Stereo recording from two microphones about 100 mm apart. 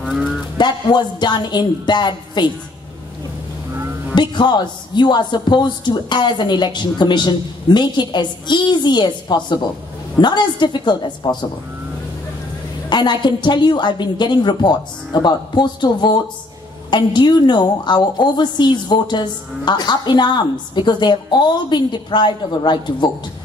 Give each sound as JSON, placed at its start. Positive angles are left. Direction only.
{"t": 0.0, "sound": "a sound", "side_deg": 0}
{"t": 0.6, "sound": "a woman's voice", "side_deg": 50}
{"t": 4.1, "sound": "a woman's voice", "side_deg": 50}
{"t": 12.9, "sound": "a woman's voice", "side_deg": 50}